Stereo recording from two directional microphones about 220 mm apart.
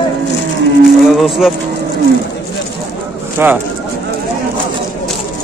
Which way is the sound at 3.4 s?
10° right (ahead or behind).